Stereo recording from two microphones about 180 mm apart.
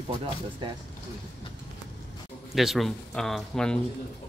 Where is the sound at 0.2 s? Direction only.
25° right (ahead or behind).